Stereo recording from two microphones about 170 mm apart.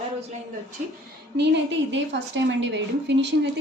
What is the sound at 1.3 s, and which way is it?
A woman's voice, 90° right.